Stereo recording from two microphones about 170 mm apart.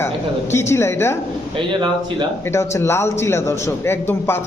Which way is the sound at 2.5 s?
15° left (ahead or behind).